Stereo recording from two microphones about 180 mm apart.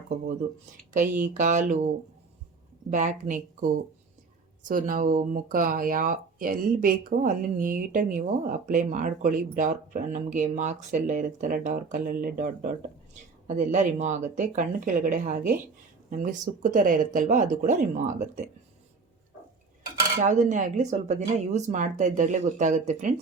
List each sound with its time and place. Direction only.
1.2 s speech: 45° right (ahead or behind)
2.9 s speech: 45° right (ahead or behind)
4.7 s speech: 50° right (ahead or behind)
20.2 s speech: 45° right (ahead or behind)